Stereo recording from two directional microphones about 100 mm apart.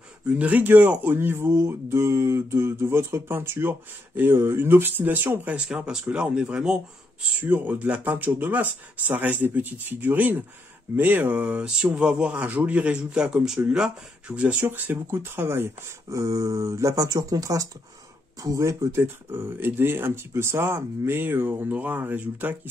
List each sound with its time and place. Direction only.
0.4 s speech: 15° right (ahead or behind)